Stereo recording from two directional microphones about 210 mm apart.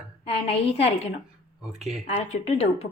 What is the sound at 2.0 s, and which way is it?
Speech, 30° left (ahead or behind).